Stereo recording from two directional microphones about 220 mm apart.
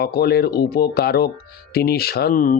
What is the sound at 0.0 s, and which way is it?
Speech, 45° left (ahead or behind).